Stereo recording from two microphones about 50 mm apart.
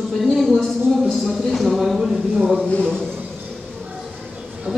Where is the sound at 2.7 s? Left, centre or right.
Centre.